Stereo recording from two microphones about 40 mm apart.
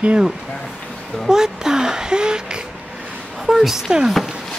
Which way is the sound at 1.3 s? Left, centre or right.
Centre.